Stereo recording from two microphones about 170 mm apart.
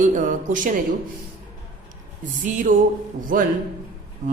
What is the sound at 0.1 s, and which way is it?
Speech, 50° right (ahead or behind).